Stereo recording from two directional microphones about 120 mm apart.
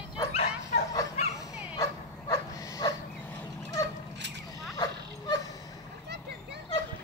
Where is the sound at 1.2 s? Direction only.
70° left (ahead or behind).